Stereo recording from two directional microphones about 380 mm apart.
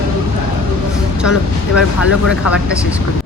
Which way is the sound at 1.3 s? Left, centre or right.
Left.